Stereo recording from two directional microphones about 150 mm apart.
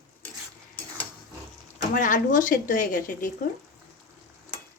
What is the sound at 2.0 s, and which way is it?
A woman's voice, 60° left (ahead or behind).